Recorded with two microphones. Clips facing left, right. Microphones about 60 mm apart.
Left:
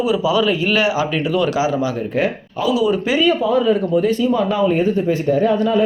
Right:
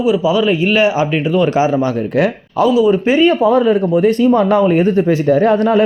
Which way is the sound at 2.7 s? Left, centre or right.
Right.